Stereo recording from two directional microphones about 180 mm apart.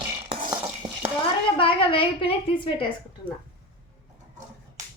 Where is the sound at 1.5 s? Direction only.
30° left (ahead or behind).